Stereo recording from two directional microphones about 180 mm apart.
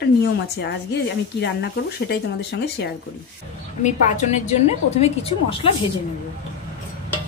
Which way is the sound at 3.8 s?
40° left (ahead or behind).